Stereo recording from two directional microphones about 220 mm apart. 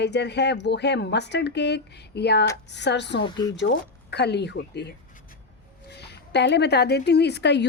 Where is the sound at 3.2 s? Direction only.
20° left (ahead or behind).